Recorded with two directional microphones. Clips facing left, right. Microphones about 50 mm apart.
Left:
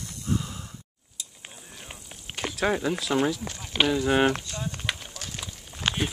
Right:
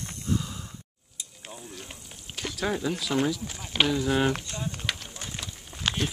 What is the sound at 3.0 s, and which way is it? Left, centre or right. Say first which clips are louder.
Speech: left 2 dB; centre.